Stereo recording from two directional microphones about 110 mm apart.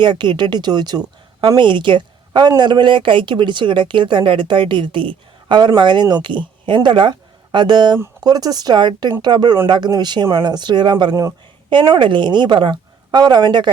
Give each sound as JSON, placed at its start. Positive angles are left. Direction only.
{"t": 0.0, "sound": "a woman's voice", "side_deg": -45}
{"t": 11.1, "sound": "speech", "side_deg": -30}
{"t": 11.7, "sound": "speech", "side_deg": -45}